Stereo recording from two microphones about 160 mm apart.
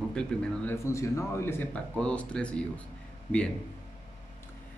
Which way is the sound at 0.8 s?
20° left (ahead or behind).